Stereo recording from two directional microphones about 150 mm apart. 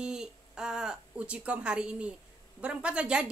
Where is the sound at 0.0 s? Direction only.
5° right (ahead or behind).